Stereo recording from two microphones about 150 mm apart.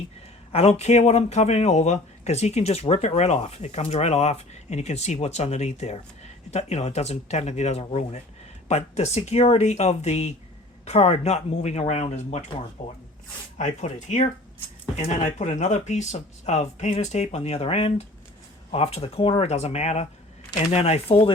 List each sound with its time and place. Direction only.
0.5 s speech: 45° left (ahead or behind)
12.8 s speech: 30° left (ahead or behind)
13.6 s speech: 50° left (ahead or behind)